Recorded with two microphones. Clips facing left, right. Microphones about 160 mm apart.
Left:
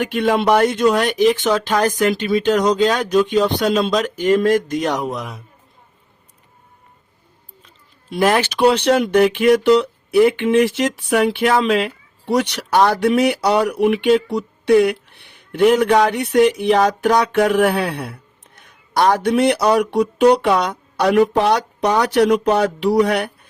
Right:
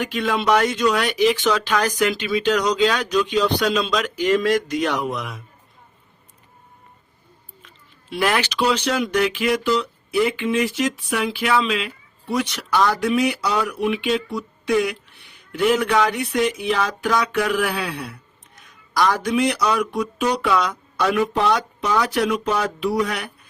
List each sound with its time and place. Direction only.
0.0 s speech: 55° left (ahead or behind); by 5.3 s 40° left (ahead or behind)
8.1 s speech: 45° left (ahead or behind); by 15.3 s 65° left (ahead or behind)
15.5 s speech: 55° left (ahead or behind)
16.2 s speech: 65° left (ahead or behind)
17.2 s speech: 50° left (ahead or behind)
20.9 s speech: 35° left (ahead or behind)
22.4 s a sound: 65° left (ahead or behind)
22.9 s speech: 35° left (ahead or behind)